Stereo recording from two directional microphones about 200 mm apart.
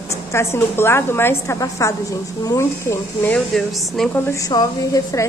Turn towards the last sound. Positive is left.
turn(degrees=20)  # may be behind; listen again after turning